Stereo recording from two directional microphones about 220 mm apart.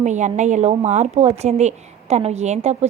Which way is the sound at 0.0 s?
30° right (ahead or behind).